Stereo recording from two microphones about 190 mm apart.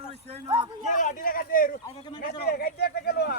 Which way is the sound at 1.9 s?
20° left (ahead or behind).